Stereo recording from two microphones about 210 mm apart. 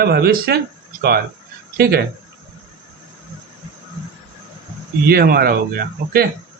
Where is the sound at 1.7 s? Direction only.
50° right (ahead or behind).